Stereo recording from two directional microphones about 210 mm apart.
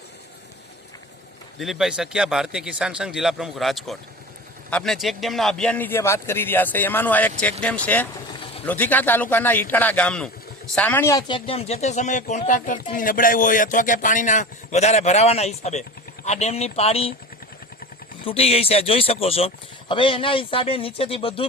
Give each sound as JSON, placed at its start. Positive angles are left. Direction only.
{"t": 1.5, "sound": "a man's voice", "side_deg": 0}
{"t": 18.3, "sound": "speech", "side_deg": 30}